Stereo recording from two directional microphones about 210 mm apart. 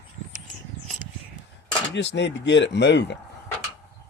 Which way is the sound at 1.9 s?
55° left (ahead or behind).